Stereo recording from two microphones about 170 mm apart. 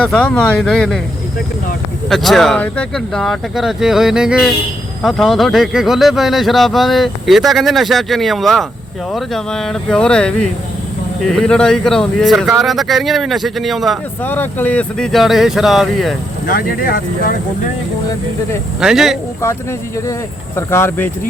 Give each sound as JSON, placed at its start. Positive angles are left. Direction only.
{"t": 0.0, "sound": "speech", "side_deg": 5}
{"t": 2.0, "sound": "speech", "side_deg": 0}
{"t": 14.3, "sound": "speech", "side_deg": 10}
{"t": 16.5, "sound": "speech", "side_deg": 55}
{"t": 18.8, "sound": "speech", "side_deg": -5}
{"t": 20.6, "sound": "speech", "side_deg": 15}